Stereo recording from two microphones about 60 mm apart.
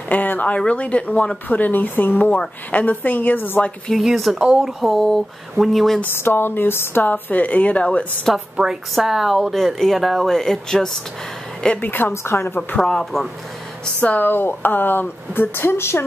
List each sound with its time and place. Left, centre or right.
0.1 s a woman's voice: left
1.5 s a woman's voice: left
3.9 s speech: centre
6.0 s speech: left
8.9 s speech: centre
11.8 s speech: left
12.1 s a woman's voice: left
12.7 s speech: centre
13.9 s speech: left